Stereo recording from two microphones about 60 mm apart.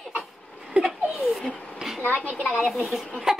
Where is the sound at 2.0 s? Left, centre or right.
Left.